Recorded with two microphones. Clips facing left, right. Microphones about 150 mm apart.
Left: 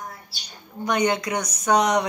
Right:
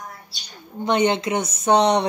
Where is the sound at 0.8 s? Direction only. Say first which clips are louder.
Right 3 dB; 25° right (ahead or behind).